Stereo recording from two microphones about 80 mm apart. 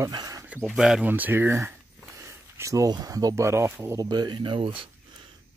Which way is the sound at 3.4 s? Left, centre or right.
Right.